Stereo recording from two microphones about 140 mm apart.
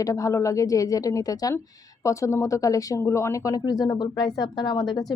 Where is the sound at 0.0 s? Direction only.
25° left (ahead or behind).